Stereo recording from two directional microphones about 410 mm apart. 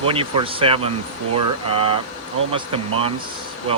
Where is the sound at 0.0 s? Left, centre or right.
Centre.